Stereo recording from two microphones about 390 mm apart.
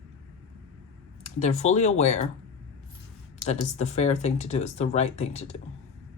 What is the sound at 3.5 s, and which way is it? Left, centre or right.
Speech, centre.